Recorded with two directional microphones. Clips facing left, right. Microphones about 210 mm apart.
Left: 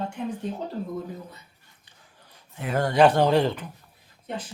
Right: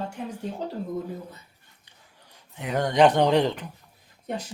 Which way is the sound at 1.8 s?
15° right (ahead or behind).